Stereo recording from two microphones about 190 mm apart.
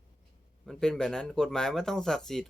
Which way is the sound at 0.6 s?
5° left (ahead or behind).